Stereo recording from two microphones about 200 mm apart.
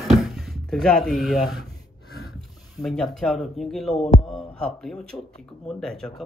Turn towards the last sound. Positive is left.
turn(degrees=5)  # may be behind; listen again after turning